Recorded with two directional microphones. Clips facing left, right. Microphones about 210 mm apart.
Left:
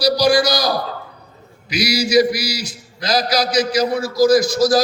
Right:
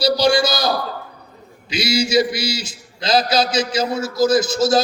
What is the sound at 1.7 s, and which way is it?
A man's voice, 25° right (ahead or behind).